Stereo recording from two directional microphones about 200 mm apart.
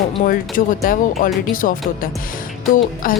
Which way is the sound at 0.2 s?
40° left (ahead or behind).